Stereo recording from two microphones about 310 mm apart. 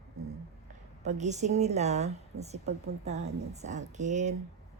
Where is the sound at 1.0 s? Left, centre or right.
Right.